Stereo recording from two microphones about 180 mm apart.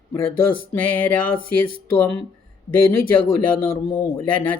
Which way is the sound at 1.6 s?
60° right (ahead or behind).